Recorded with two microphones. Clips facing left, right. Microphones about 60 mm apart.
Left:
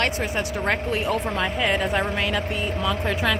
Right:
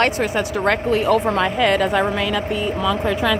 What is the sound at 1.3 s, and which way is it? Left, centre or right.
Speech, right.